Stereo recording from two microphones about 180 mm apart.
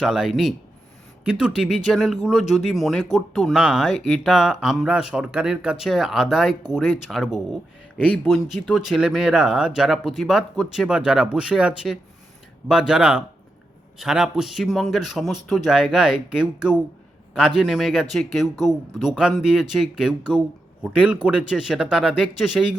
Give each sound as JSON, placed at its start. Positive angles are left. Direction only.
{"t": 0.0, "sound": "speech", "side_deg": 0}